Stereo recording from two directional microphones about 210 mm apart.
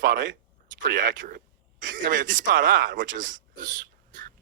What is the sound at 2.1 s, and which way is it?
Speech, 40° right (ahead or behind).